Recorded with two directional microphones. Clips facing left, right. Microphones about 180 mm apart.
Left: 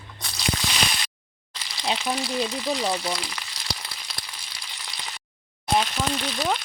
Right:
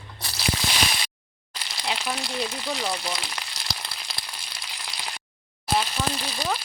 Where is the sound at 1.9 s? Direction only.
Centre (ahead or behind).